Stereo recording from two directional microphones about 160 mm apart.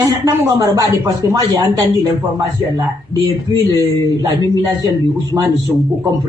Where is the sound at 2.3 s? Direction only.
20° right (ahead or behind).